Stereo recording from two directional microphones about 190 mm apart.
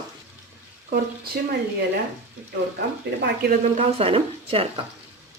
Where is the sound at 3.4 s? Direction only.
60° right (ahead or behind).